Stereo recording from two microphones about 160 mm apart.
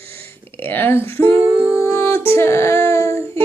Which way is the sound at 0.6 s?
15° left (ahead or behind).